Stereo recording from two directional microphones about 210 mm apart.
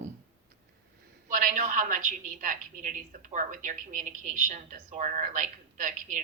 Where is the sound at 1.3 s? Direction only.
40° right (ahead or behind).